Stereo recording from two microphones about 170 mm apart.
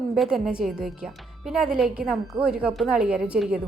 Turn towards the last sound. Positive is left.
turn(degrees=-5)  # may be behind; listen again after turning